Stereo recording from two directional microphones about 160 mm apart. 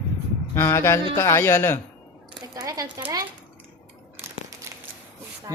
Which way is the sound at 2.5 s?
25° right (ahead or behind).